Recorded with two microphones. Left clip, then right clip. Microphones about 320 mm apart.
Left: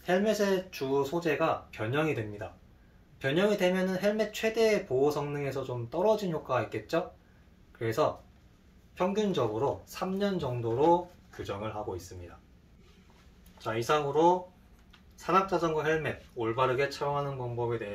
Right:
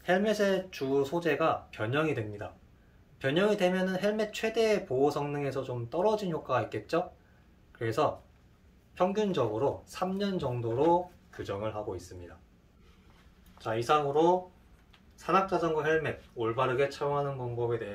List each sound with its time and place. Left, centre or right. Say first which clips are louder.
0.0 s speech: even; centre
13.6 s speech: right 1 dB; centre